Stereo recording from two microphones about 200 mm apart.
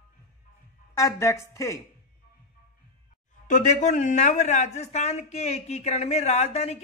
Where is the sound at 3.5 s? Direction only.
35° left (ahead or behind).